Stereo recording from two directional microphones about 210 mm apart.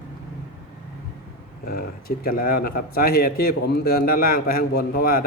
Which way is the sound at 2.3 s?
45° left (ahead or behind).